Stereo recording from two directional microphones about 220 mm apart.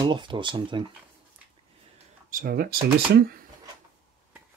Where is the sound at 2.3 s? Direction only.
45° right (ahead or behind).